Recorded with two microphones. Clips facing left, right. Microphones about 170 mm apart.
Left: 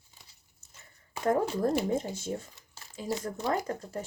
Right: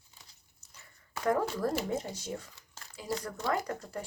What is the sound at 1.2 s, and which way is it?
Speech, 25° left (ahead or behind).